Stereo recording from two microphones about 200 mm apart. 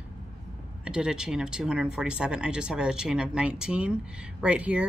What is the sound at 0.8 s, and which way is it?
Speech, 5° right (ahead or behind).